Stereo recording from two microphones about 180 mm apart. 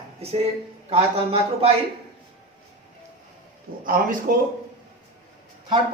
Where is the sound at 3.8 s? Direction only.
50° right (ahead or behind).